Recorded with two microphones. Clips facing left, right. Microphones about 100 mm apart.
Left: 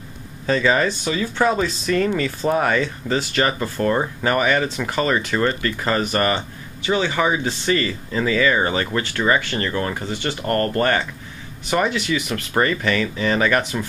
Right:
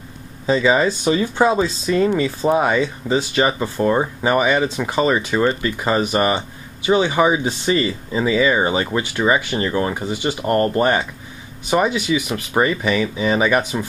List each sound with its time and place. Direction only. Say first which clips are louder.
0.5 s speech: right 2 dB; 15° right (ahead or behind)